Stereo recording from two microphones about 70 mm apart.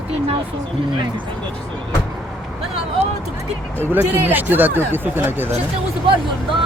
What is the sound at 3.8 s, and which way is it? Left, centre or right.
Speech, right.